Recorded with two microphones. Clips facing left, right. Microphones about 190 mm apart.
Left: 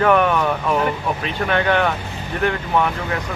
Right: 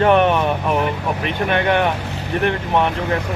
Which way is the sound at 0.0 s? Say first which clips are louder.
Right 2 dB; 25° right (ahead or behind).